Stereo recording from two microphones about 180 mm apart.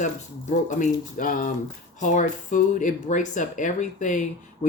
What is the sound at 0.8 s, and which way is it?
Speech, 50° left (ahead or behind).